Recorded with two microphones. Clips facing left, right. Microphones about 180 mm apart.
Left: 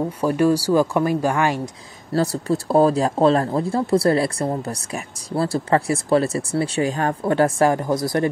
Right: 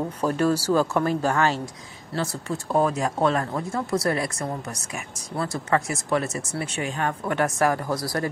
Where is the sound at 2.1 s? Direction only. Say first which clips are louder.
Left 8 dB; 35° left (ahead or behind).